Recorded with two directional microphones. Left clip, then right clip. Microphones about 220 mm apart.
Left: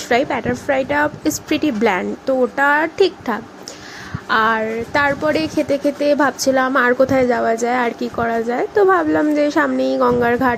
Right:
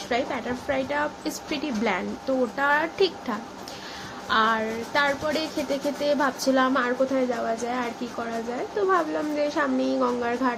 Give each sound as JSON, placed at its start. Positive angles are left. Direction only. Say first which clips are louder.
{"t": 0.1, "sound": "speech", "louder": "left 10 dB", "side_deg": 30}